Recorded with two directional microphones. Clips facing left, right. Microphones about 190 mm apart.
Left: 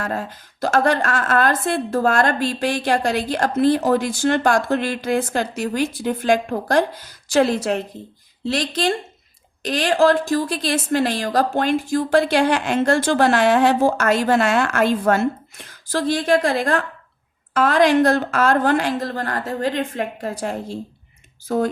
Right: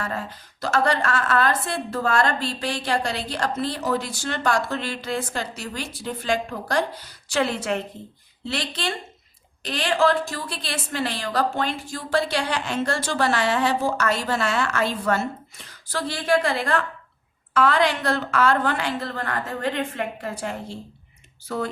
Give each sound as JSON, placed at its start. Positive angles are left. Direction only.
{"t": 0.0, "sound": "a woman's voice", "side_deg": 45}
{"t": 21.4, "sound": "a woman's voice", "side_deg": 45}